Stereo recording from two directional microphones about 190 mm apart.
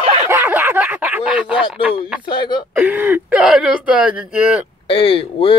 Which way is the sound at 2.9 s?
10° right (ahead or behind).